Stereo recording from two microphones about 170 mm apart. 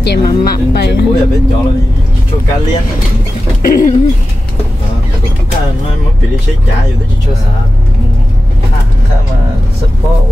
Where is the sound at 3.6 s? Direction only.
55° left (ahead or behind).